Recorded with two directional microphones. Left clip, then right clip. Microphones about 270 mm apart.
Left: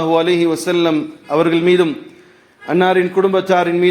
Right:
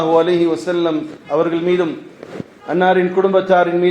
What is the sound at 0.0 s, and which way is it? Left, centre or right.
A man's voice, left.